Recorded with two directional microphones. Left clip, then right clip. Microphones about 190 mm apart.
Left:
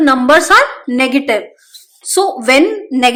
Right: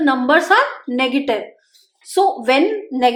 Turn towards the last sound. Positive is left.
turn(degrees=45)  # may be behind; listen again after turning